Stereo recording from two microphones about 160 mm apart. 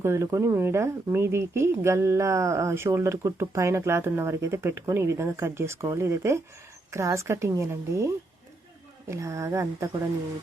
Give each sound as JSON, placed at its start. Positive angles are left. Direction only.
{"t": 0.0, "sound": "speech", "side_deg": -15}